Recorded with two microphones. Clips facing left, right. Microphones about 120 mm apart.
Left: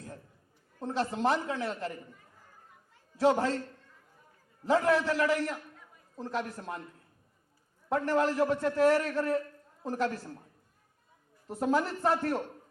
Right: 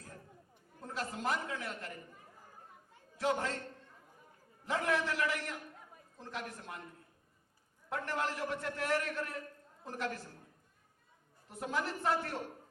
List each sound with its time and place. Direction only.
0.9 s a man's voice: 30° left (ahead or behind)
4.6 s a man's voice: 35° left (ahead or behind)
7.9 s a man's voice: 35° left (ahead or behind)
11.4 s a man's voice: 35° left (ahead or behind)